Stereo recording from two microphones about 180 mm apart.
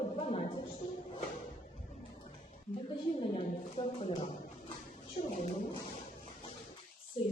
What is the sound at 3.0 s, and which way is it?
Speech, 30° left (ahead or behind).